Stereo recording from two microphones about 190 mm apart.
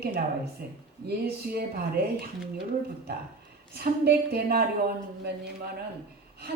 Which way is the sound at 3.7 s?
55° right (ahead or behind).